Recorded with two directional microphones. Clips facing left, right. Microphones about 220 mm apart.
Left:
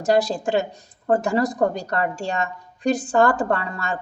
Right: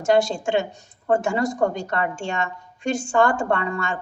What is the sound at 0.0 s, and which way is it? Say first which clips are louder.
A woman's voice: even; 35° left (ahead or behind).